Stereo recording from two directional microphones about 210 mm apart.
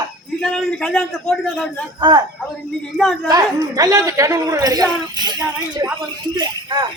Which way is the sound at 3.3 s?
15° right (ahead or behind).